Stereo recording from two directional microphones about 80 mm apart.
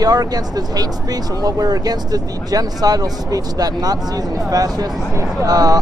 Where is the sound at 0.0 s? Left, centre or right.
Right.